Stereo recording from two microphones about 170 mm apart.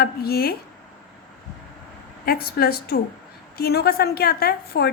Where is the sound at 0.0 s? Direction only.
65° left (ahead or behind).